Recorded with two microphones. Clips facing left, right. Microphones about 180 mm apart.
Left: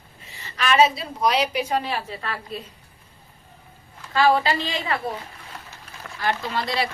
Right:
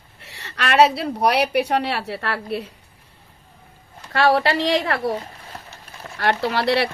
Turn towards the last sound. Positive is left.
turn(degrees=-70)  # may be behind; listen again after turning